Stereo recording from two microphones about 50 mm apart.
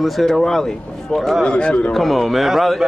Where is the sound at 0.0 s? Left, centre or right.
Centre.